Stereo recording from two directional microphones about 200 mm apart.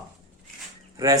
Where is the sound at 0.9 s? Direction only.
15° right (ahead or behind).